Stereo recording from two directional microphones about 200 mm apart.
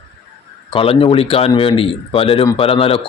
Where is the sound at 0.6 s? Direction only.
25° left (ahead or behind).